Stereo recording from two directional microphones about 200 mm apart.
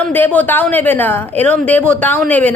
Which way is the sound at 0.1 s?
10° left (ahead or behind).